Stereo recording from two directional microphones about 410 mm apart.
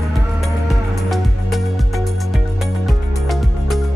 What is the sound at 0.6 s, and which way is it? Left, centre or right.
Music, centre.